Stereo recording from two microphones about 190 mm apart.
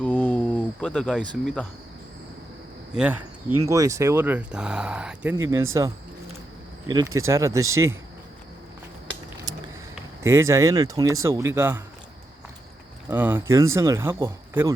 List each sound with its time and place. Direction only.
0.0 s a sound: 5° left (ahead or behind)
2.9 s speech: 5° right (ahead or behind)
6.8 s speech: 20° right (ahead or behind)
10.2 s speech: 15° right (ahead or behind)
13.1 s speech: 10° right (ahead or behind)